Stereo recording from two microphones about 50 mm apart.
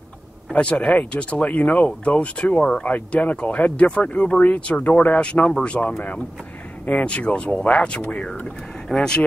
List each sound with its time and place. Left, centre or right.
0.5 s speech: left